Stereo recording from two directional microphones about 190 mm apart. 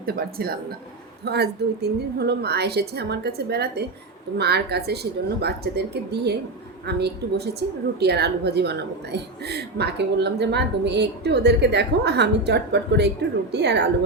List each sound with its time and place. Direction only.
0.0 s speech: 55° right (ahead or behind)